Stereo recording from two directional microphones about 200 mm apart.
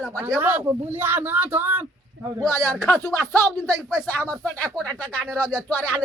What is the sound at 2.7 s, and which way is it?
Speech, 15° left (ahead or behind).